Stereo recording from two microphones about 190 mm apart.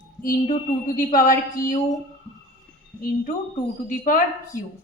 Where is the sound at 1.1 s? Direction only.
45° left (ahead or behind).